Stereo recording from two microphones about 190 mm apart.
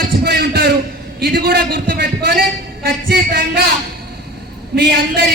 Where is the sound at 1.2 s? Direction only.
50° right (ahead or behind).